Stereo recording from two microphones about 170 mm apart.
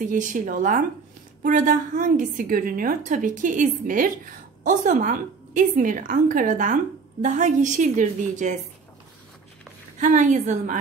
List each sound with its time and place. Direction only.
0.0 s a woman's voice: 50° right (ahead or behind)
9.9 s a woman's voice: 45° right (ahead or behind)